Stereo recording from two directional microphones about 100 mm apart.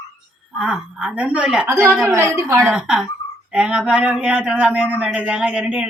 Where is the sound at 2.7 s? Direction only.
5° right (ahead or behind).